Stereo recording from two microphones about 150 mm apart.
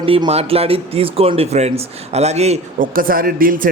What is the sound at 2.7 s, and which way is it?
Speech, 70° right (ahead or behind).